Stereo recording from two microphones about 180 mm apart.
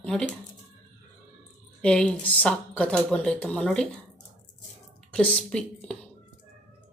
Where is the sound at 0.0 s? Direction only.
5° left (ahead or behind).